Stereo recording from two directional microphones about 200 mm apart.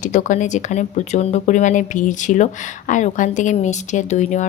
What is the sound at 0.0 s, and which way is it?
Speech, 40° left (ahead or behind).